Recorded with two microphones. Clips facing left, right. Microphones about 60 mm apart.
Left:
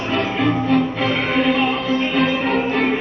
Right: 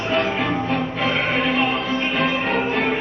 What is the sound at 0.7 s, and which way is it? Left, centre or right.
Music, right.